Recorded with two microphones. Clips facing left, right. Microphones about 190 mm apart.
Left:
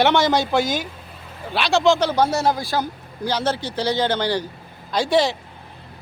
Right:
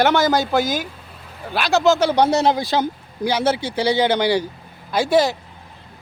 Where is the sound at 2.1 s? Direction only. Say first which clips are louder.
Right 3 dB; 20° right (ahead or behind); by 5.3 s 5° right (ahead or behind).